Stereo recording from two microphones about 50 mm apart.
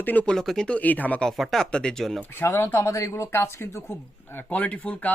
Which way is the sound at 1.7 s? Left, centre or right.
Centre.